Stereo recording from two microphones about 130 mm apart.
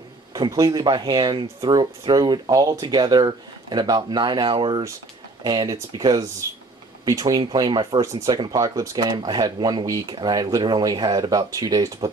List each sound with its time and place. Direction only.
0.3 s speech: 30° right (ahead or behind)